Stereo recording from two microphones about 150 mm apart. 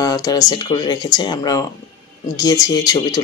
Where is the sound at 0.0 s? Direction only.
25° left (ahead or behind).